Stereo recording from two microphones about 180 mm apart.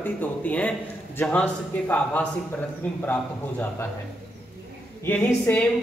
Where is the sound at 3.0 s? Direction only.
10° left (ahead or behind).